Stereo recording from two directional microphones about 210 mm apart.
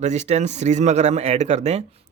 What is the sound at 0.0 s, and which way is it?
Speech, 35° right (ahead or behind).